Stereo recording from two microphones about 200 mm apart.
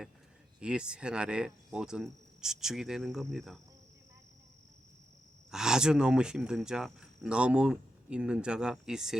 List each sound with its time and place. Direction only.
0.6 s speech: 5° right (ahead or behind)
5.5 s speech: 5° right (ahead or behind)